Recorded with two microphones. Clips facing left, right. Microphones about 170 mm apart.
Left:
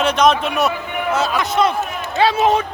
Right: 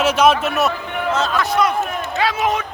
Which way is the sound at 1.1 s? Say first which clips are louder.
Left 1 dB; 10° left (ahead or behind).